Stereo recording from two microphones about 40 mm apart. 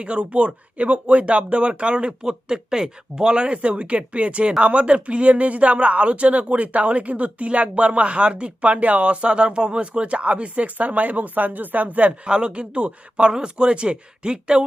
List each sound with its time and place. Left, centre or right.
0.0 s speech: right
12.2 s speech: right